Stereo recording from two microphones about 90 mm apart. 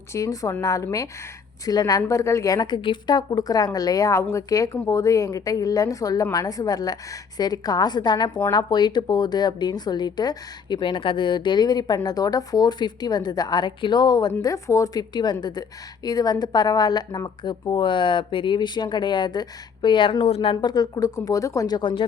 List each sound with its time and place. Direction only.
0.1 s a woman's voice: 40° left (ahead or behind)
2.6 s a woman's voice: 60° left (ahead or behind)
14.4 s a woman's voice: 35° left (ahead or behind)
15.1 s a woman's voice: 55° left (ahead or behind)
21.8 s speech: 70° left (ahead or behind)